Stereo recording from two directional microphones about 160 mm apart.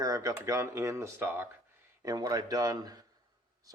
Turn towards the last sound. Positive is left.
turn(degrees=-25)  # may be behind; listen again after turning